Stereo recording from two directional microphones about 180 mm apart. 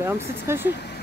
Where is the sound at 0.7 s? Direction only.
70° left (ahead or behind).